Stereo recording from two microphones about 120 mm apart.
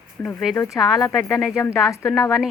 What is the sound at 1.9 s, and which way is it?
Speech, 25° left (ahead or behind).